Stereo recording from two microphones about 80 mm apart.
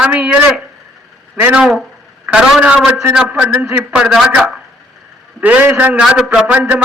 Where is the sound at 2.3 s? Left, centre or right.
Centre.